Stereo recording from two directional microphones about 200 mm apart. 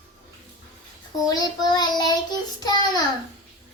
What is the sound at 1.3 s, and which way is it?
Child singing, 20° left (ahead or behind).